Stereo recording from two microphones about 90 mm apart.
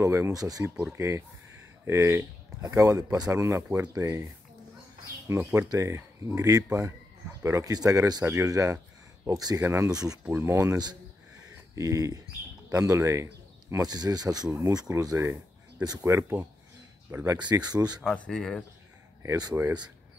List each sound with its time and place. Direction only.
0.0 s speech: 30° right (ahead or behind)
2.6 s speech: 40° right (ahead or behind)
5.3 s speech: 30° right (ahead or behind)
10.4 s speech: 30° right (ahead or behind)
13.8 s speech: 45° right (ahead or behind)
16.2 s speech: 30° right (ahead or behind)
17.6 s speech: 50° right (ahead or behind)
18.1 s speech: 10° left (ahead or behind)
19.5 s speech: 25° right (ahead or behind)